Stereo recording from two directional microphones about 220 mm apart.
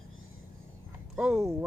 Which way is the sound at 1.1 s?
5° right (ahead or behind).